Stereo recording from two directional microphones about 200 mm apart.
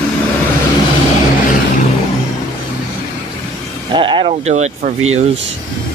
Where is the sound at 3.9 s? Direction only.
25° right (ahead or behind).